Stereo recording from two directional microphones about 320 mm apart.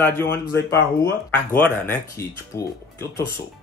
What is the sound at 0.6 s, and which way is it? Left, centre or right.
Speech, left.